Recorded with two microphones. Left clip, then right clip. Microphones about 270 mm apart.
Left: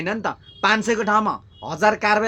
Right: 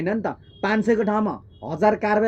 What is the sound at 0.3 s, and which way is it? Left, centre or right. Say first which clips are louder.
Speech: left 5 dB; left.